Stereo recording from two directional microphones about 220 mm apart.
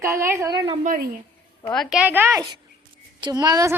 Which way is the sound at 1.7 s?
Centre (ahead or behind).